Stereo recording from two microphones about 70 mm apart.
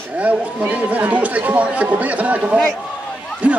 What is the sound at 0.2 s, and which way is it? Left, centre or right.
Speech, centre.